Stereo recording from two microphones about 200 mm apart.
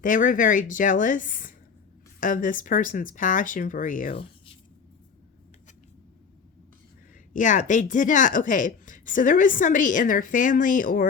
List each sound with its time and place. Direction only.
0.0 s a woman's voice: 40° left (ahead or behind)
4.1 s a sound: 30° left (ahead or behind)
7.3 s a woman's voice: 40° left (ahead or behind)